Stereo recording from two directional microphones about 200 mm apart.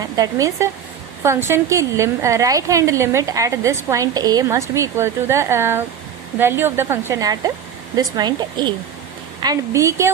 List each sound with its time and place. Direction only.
0.0 s a woman's voice: 15° right (ahead or behind)